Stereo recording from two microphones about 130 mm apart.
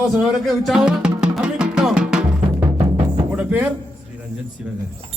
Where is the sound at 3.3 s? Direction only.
10° right (ahead or behind).